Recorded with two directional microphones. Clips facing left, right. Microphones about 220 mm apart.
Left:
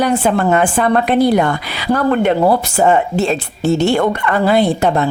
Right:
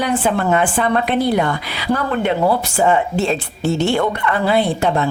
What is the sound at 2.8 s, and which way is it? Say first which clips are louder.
Speech: left 2 dB; 40° left (ahead or behind).